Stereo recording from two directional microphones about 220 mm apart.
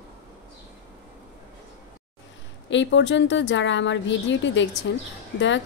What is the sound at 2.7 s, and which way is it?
A woman's voice, 55° left (ahead or behind).